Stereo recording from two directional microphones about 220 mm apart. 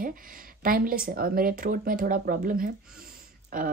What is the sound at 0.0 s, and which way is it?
Speech, 40° right (ahead or behind).